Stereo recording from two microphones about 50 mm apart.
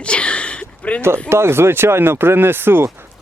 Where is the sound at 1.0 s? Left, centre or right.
Right.